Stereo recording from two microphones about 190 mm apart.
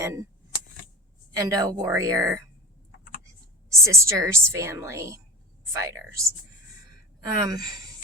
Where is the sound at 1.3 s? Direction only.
20° right (ahead or behind).